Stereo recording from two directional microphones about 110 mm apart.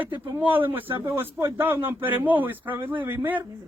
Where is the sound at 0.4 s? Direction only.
15° right (ahead or behind).